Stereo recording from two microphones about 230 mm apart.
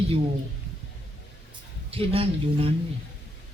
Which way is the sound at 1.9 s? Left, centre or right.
Right.